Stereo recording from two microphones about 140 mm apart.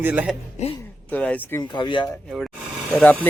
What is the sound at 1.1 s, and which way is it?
Speech, 10° left (ahead or behind).